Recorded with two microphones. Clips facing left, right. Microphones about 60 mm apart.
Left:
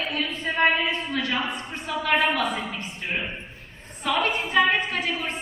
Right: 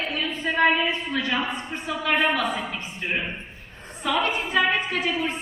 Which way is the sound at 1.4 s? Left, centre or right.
Right.